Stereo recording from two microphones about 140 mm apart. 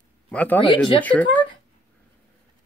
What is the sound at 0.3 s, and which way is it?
Speech, 10° left (ahead or behind).